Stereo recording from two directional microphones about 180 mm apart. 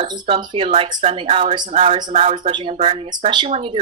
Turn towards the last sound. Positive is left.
turn(degrees=-30)  # may be behind; listen again after turning